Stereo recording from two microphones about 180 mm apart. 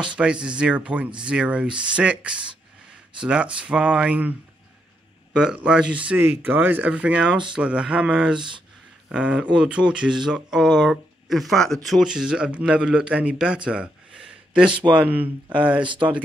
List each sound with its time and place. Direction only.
0.2 s speech: 5° right (ahead or behind)
1.7 s speech: 25° right (ahead or behind)
2.0 s speech: 5° right (ahead or behind)
8.4 s speech: 25° right (ahead or behind)
9.1 s speech: 5° right (ahead or behind)
13.7 s gasp: 5° right (ahead or behind)
14.9 s speech: 10° right (ahead or behind)
15.8 s speech: 25° right (ahead or behind)